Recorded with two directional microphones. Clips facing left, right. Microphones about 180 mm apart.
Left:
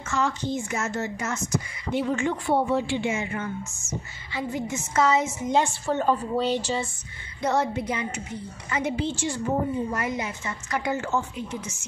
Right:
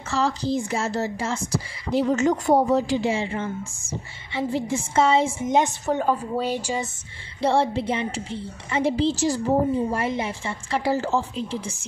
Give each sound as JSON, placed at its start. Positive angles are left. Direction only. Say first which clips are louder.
{"t": 0.1, "sound": "speech", "louder": "right 3 dB", "side_deg": -35}
{"t": 7.4, "sound": "a woman's voice", "louder": "right 4 dB", "side_deg": -30}